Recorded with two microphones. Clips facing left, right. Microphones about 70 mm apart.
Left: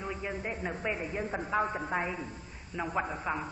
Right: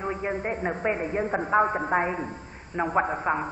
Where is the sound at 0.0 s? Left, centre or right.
Right.